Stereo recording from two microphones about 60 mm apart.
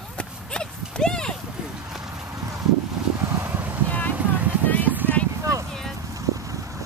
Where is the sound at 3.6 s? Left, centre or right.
Right.